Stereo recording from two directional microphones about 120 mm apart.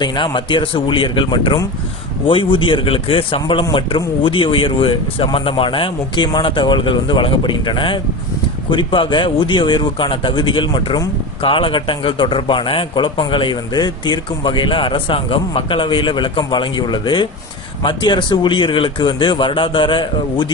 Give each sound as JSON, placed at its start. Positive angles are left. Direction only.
{"t": 0.0, "sound": "speech", "side_deg": 40}